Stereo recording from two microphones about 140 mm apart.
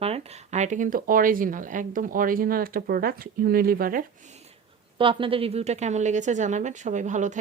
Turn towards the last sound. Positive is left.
turn(degrees=-60)  # may be behind; listen again after turning